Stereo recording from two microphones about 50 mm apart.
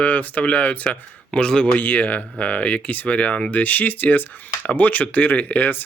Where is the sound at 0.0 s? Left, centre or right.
Left.